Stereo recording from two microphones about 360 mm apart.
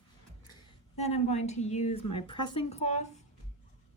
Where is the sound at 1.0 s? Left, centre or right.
Centre.